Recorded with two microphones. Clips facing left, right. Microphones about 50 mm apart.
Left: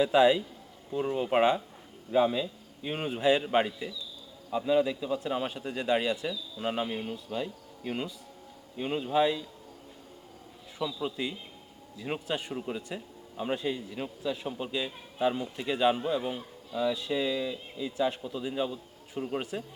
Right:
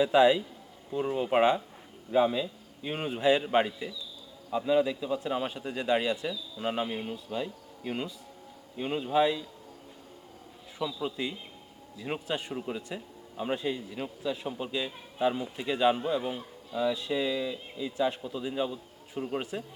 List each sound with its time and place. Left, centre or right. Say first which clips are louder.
0.0 s speech: even; centre
10.8 s speech: even; centre